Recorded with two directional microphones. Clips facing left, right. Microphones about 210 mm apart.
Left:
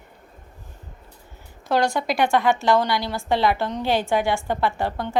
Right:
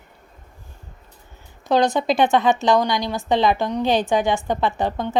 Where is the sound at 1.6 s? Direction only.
20° right (ahead or behind).